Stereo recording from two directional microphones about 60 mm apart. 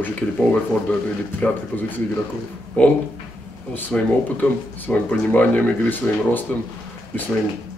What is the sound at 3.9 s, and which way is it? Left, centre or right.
Speech, left.